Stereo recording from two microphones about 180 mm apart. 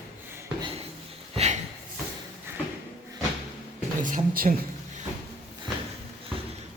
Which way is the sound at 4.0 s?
45° right (ahead or behind).